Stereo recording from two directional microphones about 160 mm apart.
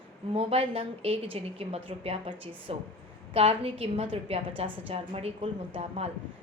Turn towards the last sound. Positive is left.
turn(degrees=-35)  # may be behind; listen again after turning